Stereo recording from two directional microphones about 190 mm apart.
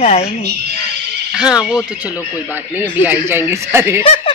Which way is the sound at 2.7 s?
10° right (ahead or behind).